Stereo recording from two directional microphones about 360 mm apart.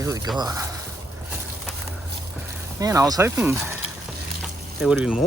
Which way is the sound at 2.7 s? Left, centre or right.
Centre.